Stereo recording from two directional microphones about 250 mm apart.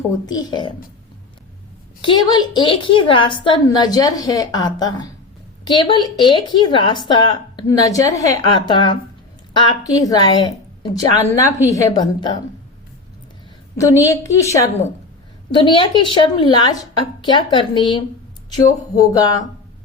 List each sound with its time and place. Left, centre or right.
0.3 s speech: centre
2.0 s a woman's voice: centre
13.7 s a woman's voice: centre